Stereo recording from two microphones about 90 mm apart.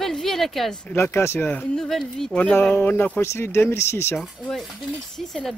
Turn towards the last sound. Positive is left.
turn(degrees=5)  # may be behind; listen again after turning